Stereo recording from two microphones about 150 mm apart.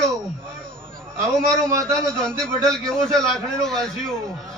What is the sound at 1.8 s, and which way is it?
A man's voice, 5° left (ahead or behind).